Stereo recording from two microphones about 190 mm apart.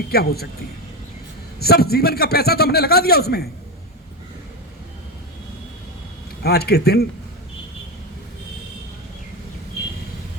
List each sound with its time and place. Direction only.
0.1 s a man's voice: 55° left (ahead or behind)
1.5 s a man's voice: 55° left (ahead or behind)
6.4 s a man's voice: 55° left (ahead or behind)